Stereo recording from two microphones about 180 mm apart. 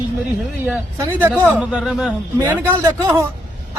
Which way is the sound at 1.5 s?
Centre (ahead or behind).